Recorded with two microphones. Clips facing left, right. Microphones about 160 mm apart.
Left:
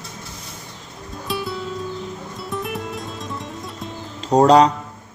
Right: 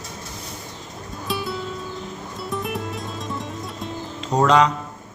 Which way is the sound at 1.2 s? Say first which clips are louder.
Left 1 dB; centre (ahead or behind).